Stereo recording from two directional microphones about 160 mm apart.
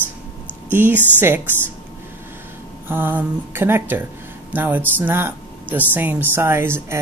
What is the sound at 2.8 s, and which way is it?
Speech, 10° right (ahead or behind).